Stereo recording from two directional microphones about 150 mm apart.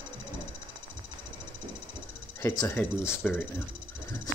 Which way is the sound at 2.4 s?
20° left (ahead or behind).